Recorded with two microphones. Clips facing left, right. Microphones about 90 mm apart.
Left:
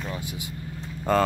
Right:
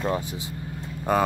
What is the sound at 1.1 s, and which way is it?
Speech, 10° right (ahead or behind).